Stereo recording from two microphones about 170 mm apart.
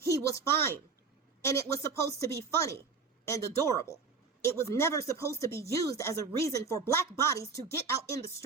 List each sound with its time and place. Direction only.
0.0 s speech: 20° left (ahead or behind)